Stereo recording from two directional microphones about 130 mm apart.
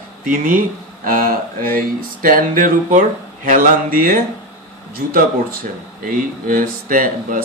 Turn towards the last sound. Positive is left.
turn(degrees=-90)